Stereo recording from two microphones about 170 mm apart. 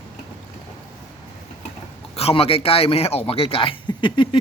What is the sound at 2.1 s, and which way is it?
A man's voice, 35° left (ahead or behind).